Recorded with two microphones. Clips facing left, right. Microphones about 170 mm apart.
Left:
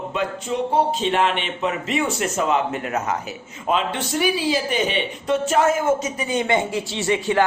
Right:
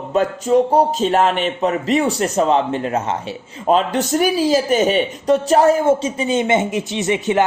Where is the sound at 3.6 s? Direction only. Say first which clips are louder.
Right 6 dB; 40° right (ahead or behind); by 7.4 s 20° right (ahead or behind).